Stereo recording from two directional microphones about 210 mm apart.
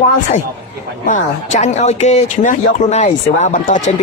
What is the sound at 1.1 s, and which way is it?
Speech, 35° left (ahead or behind).